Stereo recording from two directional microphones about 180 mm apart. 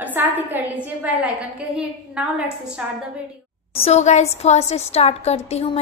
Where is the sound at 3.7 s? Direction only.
35° left (ahead or behind).